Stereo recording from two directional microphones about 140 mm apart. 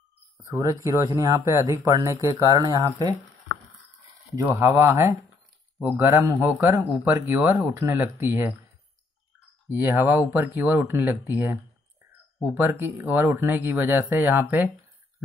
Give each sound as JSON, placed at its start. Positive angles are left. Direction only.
{"t": 0.5, "sound": "speech", "side_deg": -20}
{"t": 4.4, "sound": "speech", "side_deg": -20}
{"t": 7.3, "sound": "speech", "side_deg": -5}
{"t": 7.6, "sound": "speech", "side_deg": -20}
{"t": 9.7, "sound": "speech", "side_deg": -15}